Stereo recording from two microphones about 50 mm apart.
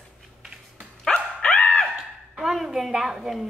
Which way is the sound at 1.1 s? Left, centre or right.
Centre.